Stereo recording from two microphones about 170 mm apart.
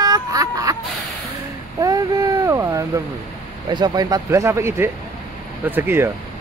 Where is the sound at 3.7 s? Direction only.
25° right (ahead or behind).